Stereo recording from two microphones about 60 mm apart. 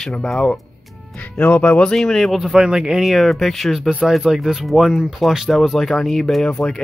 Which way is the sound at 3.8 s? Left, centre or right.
Centre.